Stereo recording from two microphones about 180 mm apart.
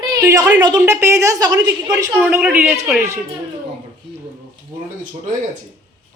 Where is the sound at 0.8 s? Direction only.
15° right (ahead or behind).